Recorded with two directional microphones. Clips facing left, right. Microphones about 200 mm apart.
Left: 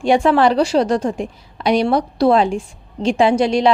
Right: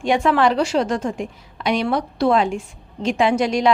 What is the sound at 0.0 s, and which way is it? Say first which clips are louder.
A woman's voice: left 4 dB; 30° left (ahead or behind).